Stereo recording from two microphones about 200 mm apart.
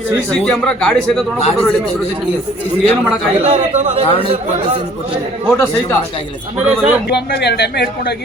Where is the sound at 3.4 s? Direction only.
35° right (ahead or behind).